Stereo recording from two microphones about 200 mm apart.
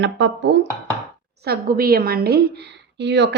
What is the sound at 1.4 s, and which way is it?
A woman's voice, 50° right (ahead or behind).